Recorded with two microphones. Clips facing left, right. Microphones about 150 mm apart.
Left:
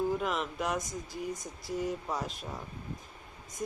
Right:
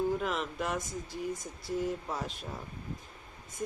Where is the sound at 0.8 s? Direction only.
40° left (ahead or behind).